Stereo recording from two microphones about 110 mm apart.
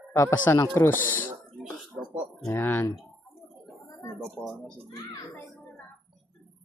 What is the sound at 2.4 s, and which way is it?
Speech, 20° left (ahead or behind).